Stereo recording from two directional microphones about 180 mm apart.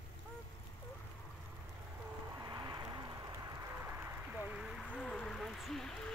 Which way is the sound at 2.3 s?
20° right (ahead or behind).